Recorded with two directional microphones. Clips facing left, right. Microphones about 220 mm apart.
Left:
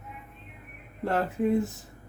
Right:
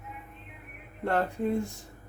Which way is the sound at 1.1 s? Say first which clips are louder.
Left 2 dB; 5° left (ahead or behind).